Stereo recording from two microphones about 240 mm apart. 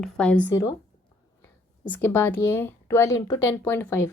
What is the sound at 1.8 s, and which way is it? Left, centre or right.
Speech, centre.